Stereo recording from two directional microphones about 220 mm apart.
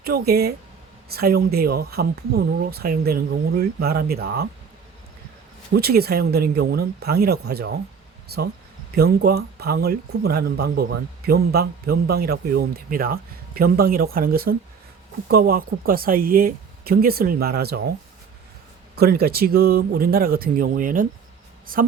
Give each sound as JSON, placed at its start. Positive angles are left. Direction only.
{"t": 0.0, "sound": "speech", "side_deg": -45}
{"t": 5.7, "sound": "speech", "side_deg": -45}
{"t": 18.9, "sound": "a woman's voice", "side_deg": -45}